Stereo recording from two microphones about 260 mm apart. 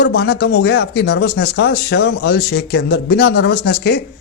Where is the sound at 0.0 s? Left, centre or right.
Left.